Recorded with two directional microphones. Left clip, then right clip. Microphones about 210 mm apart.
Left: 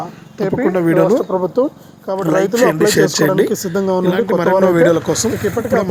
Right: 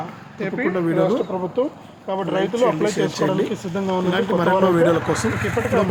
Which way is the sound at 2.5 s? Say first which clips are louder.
Left 5 dB; 50° left (ahead or behind).